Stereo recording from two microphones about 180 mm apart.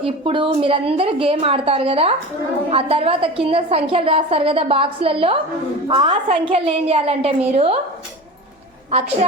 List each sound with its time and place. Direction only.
0.0 s a woman's voice: 30° right (ahead or behind)